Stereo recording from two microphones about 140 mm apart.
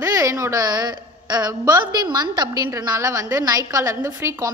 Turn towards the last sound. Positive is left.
turn(degrees=-20)  # may be behind; listen again after turning